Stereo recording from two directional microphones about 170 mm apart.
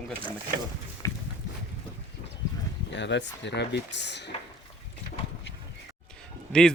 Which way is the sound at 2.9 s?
90° left.